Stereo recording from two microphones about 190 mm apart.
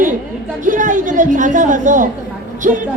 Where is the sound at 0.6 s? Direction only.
45° right (ahead or behind).